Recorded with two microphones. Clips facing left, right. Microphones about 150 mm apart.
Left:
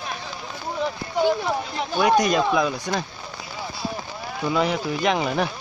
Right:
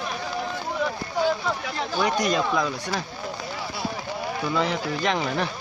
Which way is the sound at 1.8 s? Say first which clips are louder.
Left 6 dB; 15° left (ahead or behind).